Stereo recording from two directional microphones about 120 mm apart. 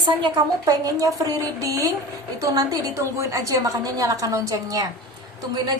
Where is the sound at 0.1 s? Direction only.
35° right (ahead or behind).